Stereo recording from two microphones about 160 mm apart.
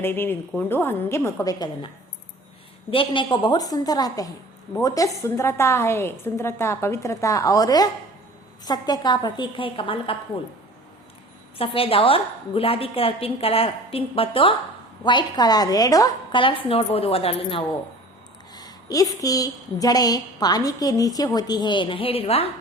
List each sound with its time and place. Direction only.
0.0 s a woman's voice: 15° left (ahead or behind)
2.9 s a woman's voice: 30° left (ahead or behind)
11.5 s a woman's voice: 35° left (ahead or behind)
18.5 s a woman's voice: 25° left (ahead or behind)